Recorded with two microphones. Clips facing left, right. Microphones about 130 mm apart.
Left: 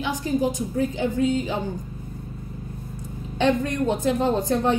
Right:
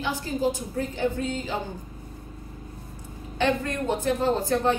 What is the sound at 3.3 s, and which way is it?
A woman's voice, 15° left (ahead or behind).